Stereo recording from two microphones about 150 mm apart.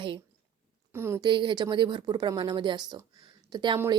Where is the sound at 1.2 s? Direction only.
30° right (ahead or behind).